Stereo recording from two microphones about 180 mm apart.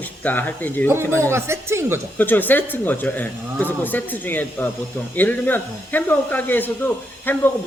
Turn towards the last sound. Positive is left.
turn(degrees=10)  # may be behind; listen again after turning